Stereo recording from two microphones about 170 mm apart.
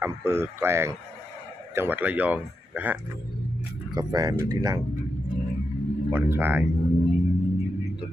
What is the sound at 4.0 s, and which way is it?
Speech, 20° right (ahead or behind).